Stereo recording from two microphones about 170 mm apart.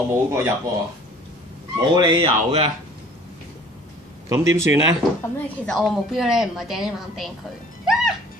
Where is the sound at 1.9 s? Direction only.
25° right (ahead or behind).